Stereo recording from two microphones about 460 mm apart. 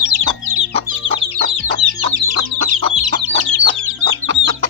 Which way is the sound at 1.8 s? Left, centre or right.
Right.